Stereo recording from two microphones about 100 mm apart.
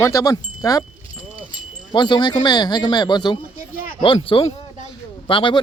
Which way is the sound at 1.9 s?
50° left (ahead or behind).